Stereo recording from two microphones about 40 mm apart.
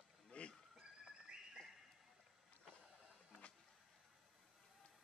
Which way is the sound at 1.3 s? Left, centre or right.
Right.